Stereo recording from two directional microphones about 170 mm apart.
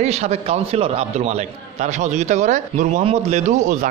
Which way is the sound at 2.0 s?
45° right (ahead or behind).